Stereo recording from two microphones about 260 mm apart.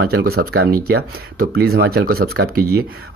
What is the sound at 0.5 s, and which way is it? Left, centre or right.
Speech, right.